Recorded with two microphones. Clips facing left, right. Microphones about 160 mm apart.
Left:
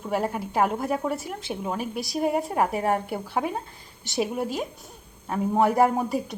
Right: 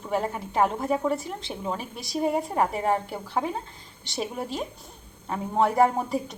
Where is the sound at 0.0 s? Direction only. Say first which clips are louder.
Left 1 dB; 5° left (ahead or behind).